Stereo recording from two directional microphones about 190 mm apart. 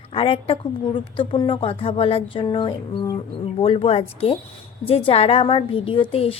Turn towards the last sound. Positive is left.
turn(degrees=30)  # may be behind; listen again after turning